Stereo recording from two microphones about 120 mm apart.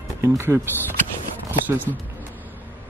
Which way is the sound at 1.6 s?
15° right (ahead or behind).